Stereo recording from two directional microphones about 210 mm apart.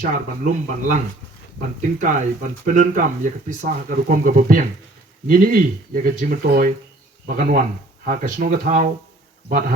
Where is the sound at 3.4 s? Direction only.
40° right (ahead or behind).